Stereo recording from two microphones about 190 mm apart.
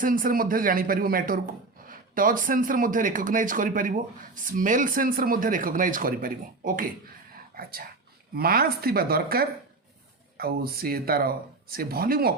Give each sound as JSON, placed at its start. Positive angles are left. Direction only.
{"t": 0.0, "sound": "speech", "side_deg": -50}